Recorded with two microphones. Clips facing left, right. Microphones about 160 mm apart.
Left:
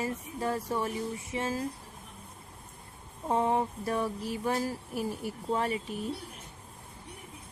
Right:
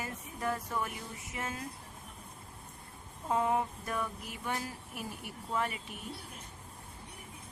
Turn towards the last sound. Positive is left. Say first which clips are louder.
# left 5 dB
turn(degrees=35)  # may be behind; listen again after turning